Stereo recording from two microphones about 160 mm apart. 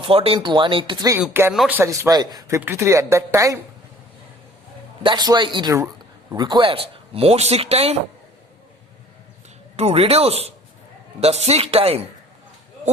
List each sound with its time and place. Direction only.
0.0 s speech: 35° right (ahead or behind)
1.3 s speech: 15° right (ahead or behind)
1.5 s a man's voice: 5° right (ahead or behind)
1.8 s a man's voice: 20° right (ahead or behind)
5.0 s a man's voice: 25° right (ahead or behind)
9.7 s speech: 40° right (ahead or behind)